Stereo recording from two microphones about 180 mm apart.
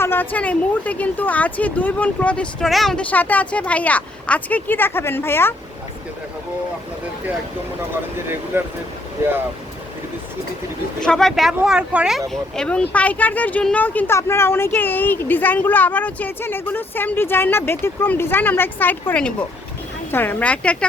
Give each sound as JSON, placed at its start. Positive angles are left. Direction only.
{"t": 0.0, "sound": "speech", "side_deg": 10}
{"t": 8.5, "sound": "speech", "side_deg": -10}
{"t": 11.0, "sound": "speech", "side_deg": 5}